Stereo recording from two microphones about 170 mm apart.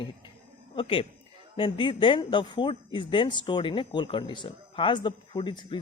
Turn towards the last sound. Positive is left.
turn(degrees=25)  # may be behind; listen again after turning